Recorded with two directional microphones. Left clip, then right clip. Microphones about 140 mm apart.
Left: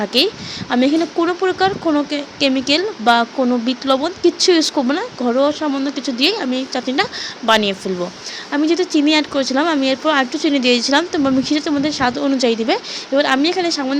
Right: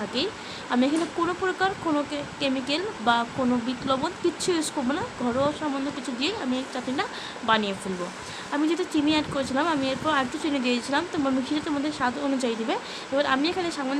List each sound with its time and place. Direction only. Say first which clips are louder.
0.7 s speech: left 8 dB; 40° left (ahead or behind)
8.5 s speech: left 9 dB; 40° left (ahead or behind)